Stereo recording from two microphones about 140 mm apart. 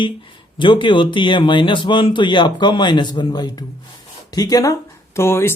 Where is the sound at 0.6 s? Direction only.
35° left (ahead or behind).